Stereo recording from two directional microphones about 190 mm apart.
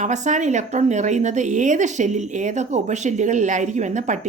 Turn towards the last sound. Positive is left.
turn(degrees=-40)  # may be behind; listen again after turning